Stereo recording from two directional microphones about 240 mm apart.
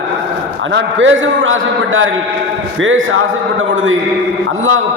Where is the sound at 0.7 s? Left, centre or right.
Right.